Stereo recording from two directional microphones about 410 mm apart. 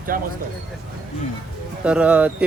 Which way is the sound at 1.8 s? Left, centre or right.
Centre.